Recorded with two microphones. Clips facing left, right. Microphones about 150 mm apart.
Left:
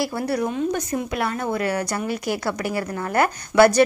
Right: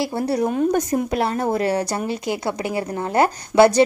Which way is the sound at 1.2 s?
35° right (ahead or behind).